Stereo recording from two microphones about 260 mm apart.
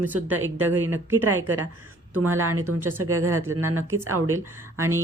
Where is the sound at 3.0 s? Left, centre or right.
Right.